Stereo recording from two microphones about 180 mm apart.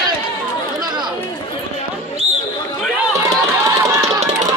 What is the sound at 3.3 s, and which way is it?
Run, 20° right (ahead or behind).